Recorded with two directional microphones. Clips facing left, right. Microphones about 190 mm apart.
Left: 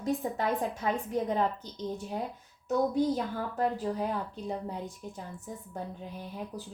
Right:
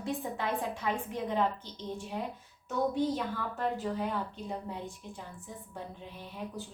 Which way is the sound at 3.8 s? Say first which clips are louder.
Left 2 dB; 35° left (ahead or behind).